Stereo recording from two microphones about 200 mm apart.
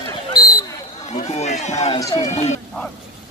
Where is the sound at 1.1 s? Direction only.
35° left (ahead or behind).